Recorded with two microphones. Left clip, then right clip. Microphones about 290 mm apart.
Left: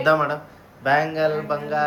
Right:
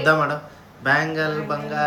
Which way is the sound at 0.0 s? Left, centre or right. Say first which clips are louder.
Even; centre.